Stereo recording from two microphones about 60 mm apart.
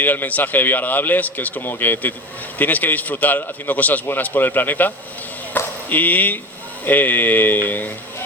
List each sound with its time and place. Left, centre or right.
0.0 s a man's voice: left